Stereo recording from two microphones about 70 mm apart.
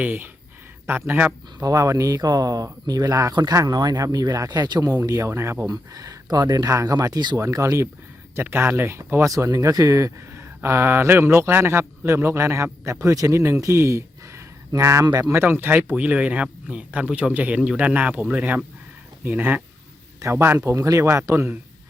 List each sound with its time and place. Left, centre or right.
0.0 s speech: right
1.7 s speech: right
2.2 s speech: right
3.7 s speech: right
5.6 s speech: right
7.3 s speech: right
8.4 s speech: right
9.2 s speech: right
15.0 s speech: right
15.3 s speech: right
16.0 s speech: right
20.7 s speech: right